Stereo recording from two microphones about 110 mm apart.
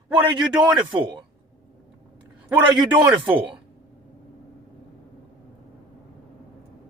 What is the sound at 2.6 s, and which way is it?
Speech, 45° right (ahead or behind).